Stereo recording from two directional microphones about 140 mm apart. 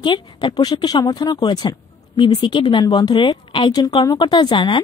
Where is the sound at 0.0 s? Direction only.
30° left (ahead or behind).